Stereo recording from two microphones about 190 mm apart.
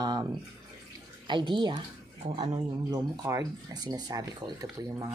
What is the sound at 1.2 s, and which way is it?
Speech, 25° right (ahead or behind).